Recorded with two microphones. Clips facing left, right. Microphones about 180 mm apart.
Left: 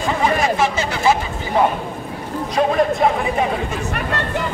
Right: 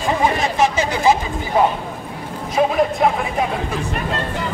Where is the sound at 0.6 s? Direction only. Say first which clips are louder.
Right 2 dB; 15° right (ahead or behind).